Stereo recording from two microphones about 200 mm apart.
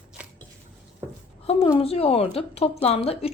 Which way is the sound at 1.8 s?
30° left (ahead or behind).